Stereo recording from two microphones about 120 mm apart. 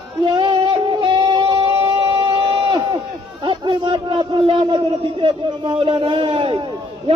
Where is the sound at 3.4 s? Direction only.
45° right (ahead or behind).